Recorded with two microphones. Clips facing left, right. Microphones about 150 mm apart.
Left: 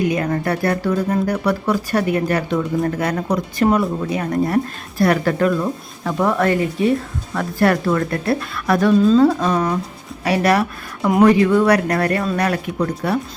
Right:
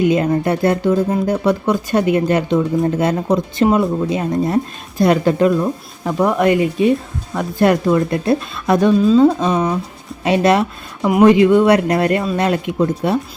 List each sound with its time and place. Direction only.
0.0 s speech: 20° right (ahead or behind)
9.0 s speech: 5° right (ahead or behind)
9.2 s speech: 20° right (ahead or behind)